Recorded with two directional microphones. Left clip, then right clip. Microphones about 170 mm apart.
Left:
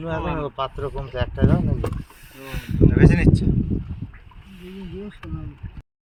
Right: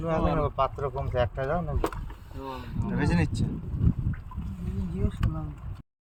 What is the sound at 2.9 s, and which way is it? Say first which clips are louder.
Speech: left 7 dB; 40° left (ahead or behind).